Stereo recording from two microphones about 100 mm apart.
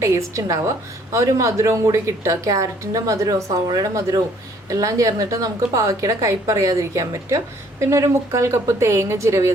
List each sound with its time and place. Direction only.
0.0 s a woman's voice: 30° right (ahead or behind)